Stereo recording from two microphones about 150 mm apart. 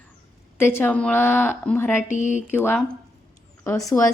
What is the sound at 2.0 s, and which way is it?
Speech, 55° left (ahead or behind).